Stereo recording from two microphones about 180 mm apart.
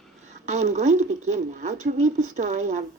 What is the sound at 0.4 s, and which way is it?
Speech, 40° right (ahead or behind).